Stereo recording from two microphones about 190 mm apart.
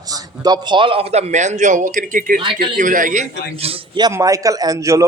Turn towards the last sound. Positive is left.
turn(degrees=-15)  # may be behind; listen again after turning